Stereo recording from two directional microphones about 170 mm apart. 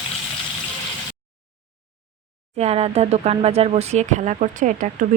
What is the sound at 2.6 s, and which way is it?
Speech, 40° right (ahead or behind).